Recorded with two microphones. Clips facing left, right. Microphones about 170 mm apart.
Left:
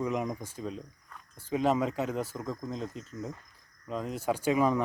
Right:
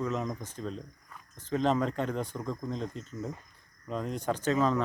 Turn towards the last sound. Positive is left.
turn(degrees=15)  # may be behind; listen again after turning